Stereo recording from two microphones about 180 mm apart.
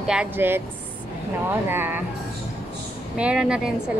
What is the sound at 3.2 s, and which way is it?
Speech, 5° right (ahead or behind).